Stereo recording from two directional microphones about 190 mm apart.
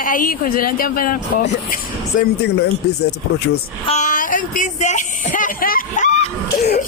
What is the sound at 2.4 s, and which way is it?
Speech, 60° left (ahead or behind).